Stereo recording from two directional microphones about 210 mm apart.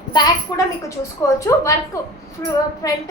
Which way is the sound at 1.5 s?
10° left (ahead or behind).